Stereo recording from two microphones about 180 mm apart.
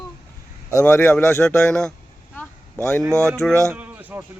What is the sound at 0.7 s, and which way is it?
A man's voice, 15° left (ahead or behind).